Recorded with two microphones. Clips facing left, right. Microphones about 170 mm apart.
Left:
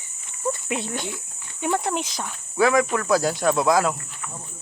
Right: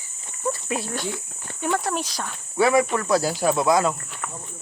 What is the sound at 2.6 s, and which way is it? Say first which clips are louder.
Speech: even; 5° right (ahead or behind).